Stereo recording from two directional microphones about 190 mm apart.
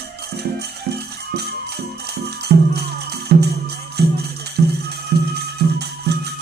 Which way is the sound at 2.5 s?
55° right (ahead or behind).